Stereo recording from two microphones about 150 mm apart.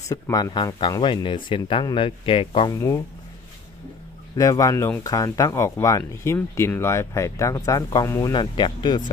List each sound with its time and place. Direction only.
0.1 s speech: 25° left (ahead or behind)
4.4 s speech: 25° left (ahead or behind)